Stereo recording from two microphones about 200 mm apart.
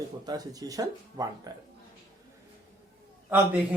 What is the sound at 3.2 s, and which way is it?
Speech, 10° right (ahead or behind).